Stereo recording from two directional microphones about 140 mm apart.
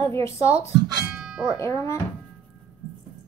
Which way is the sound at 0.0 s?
20° left (ahead or behind).